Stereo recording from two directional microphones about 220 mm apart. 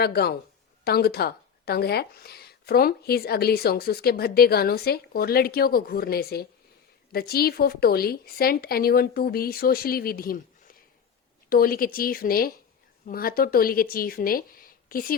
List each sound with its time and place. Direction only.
0.0 s speech: 45° left (ahead or behind)